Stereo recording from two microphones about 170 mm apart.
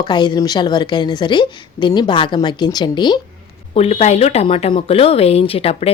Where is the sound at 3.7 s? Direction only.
40° left (ahead or behind).